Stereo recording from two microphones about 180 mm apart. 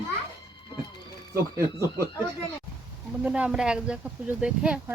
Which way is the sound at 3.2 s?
5° right (ahead or behind).